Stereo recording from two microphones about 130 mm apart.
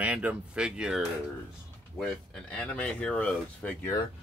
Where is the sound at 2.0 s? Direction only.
5° left (ahead or behind).